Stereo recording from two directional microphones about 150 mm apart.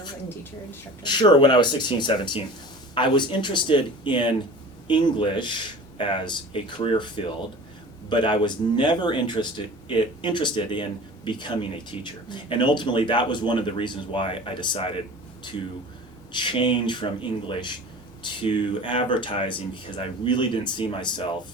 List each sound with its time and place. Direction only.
1.0 s speech: 30° left (ahead or behind)
16.3 s speech: 30° left (ahead or behind)
18.2 s speech: 35° left (ahead or behind)